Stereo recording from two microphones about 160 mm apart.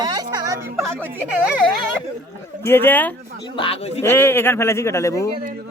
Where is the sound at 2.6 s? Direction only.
15° left (ahead or behind).